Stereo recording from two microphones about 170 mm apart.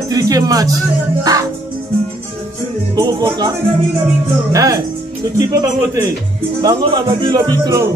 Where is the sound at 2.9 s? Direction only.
25° right (ahead or behind).